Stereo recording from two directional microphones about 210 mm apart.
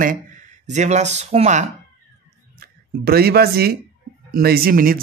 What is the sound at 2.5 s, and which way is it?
Speech, 45° right (ahead or behind).